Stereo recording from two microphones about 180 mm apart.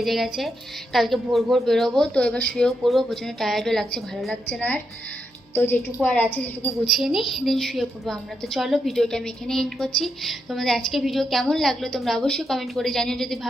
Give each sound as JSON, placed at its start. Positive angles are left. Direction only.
{"t": 0.0, "sound": "a woman's voice", "side_deg": 0}